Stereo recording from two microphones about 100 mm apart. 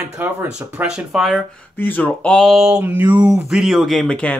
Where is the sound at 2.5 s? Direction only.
5° right (ahead or behind).